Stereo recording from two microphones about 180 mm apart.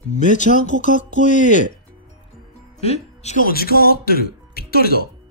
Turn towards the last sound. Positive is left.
turn(degrees=60)  # may be behind; listen again after turning